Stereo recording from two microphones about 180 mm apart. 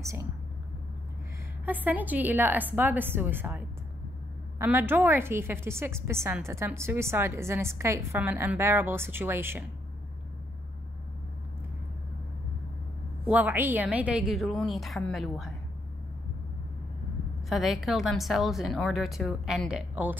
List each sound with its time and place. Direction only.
0.0 s a woman's voice: 15° right (ahead or behind)
1.7 s a woman's voice: 10° right (ahead or behind)
13.3 s a woman's voice: 10° right (ahead or behind)
17.5 s a woman's voice: centre (ahead or behind)